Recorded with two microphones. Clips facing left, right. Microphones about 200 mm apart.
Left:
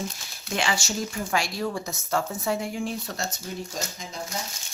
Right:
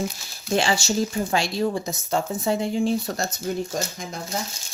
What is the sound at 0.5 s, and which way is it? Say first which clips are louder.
Speech: right 6 dB; 30° right (ahead or behind).